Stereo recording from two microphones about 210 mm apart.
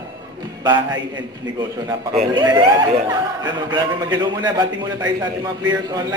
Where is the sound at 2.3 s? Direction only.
20° right (ahead or behind).